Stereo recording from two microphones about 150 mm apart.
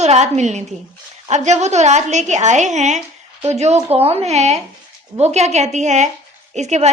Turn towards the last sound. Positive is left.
turn(degrees=-50)  # may be behind; listen again after turning